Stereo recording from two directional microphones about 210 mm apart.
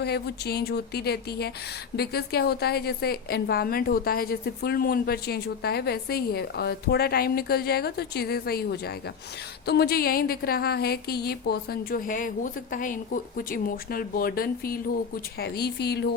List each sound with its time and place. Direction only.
0.0 s a woman's voice: 50° left (ahead or behind)